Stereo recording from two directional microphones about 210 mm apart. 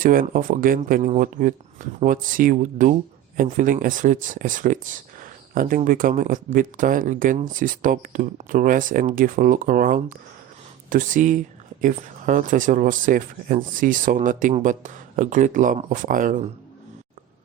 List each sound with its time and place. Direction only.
0.0 s speech: 40° right (ahead or behind)